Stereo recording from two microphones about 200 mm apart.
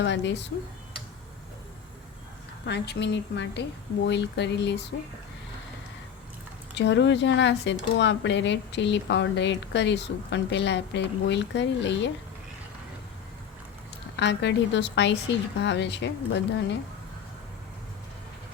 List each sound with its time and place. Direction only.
0.0 s speech: 60° left (ahead or behind)
2.6 s speech: 60° left (ahead or behind)
6.7 s speech: 60° left (ahead or behind)
14.2 s speech: 60° left (ahead or behind)